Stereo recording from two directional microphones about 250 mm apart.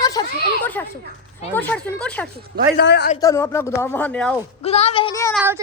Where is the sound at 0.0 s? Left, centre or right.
Centre.